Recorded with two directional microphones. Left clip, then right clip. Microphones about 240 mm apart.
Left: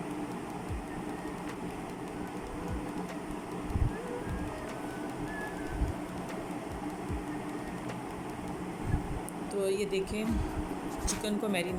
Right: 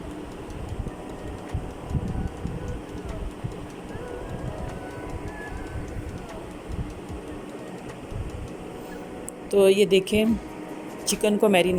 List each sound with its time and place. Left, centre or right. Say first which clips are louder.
9.5 s speech: right 14 dB; right